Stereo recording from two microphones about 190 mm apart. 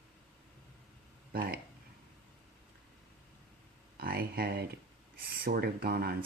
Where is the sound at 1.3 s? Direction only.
50° right (ahead or behind).